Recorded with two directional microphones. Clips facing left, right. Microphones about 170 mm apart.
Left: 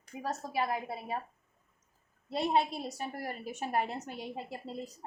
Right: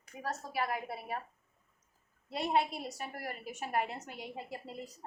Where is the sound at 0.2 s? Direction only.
20° left (ahead or behind).